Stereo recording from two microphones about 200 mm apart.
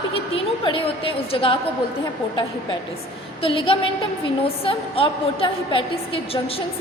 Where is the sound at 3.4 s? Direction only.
25° left (ahead or behind).